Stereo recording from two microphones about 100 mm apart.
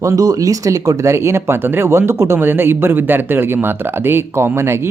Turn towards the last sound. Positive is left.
turn(degrees=-25)  # may be behind; listen again after turning